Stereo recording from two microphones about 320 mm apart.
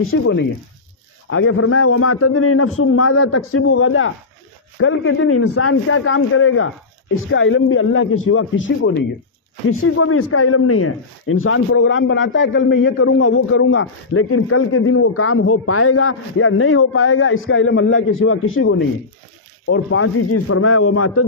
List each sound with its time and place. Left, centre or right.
0.1 s speech: left
1.3 s a man's voice: left